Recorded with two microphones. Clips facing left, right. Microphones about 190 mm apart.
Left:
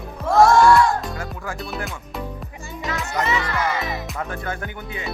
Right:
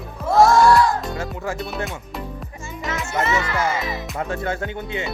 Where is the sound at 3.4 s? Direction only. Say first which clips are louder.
Right 1 dB; 25° right (ahead or behind).